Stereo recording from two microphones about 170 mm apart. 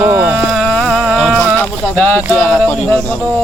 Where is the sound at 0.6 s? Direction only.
Centre (ahead or behind).